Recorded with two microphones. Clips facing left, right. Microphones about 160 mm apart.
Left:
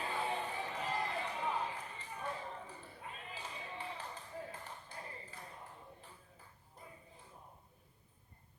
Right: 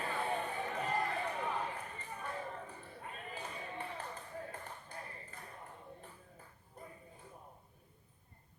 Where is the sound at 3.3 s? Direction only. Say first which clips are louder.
Right 3 dB; 55° right (ahead or behind).